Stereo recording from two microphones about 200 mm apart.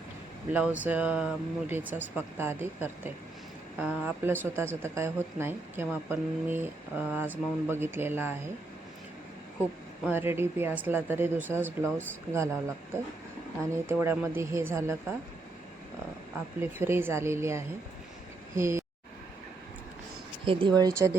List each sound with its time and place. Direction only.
0.5 s speech: 10° right (ahead or behind)
10.1 s speech: 10° right (ahead or behind)
16.6 s speech: 10° right (ahead or behind)
20.4 s speech: 25° right (ahead or behind)